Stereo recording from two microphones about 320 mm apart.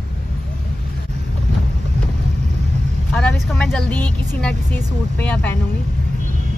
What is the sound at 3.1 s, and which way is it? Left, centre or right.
Speech, centre.